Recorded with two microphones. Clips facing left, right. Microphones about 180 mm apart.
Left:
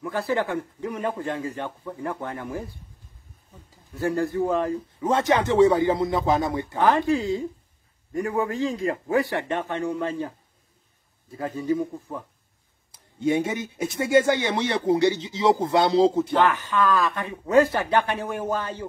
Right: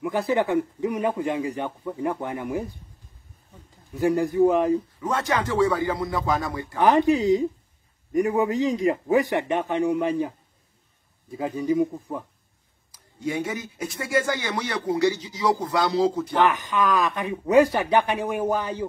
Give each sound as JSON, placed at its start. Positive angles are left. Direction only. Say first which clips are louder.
{"t": 0.0, "sound": "a man's voice", "louder": "right 2 dB", "side_deg": -15}
{"t": 3.9, "sound": "a man's voice", "louder": "right 3 dB", "side_deg": -15}
{"t": 5.0, "sound": "speech", "louder": "left 9 dB", "side_deg": 25}
{"t": 6.8, "sound": "a man's voice", "louder": "right 3 dB", "side_deg": -15}
{"t": 12.9, "sound": "speech", "louder": "left 5 dB", "side_deg": 25}
{"t": 16.4, "sound": "a man's voice", "louder": "even", "side_deg": -15}